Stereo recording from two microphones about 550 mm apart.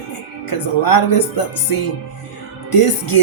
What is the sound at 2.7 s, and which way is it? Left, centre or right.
Speech, left.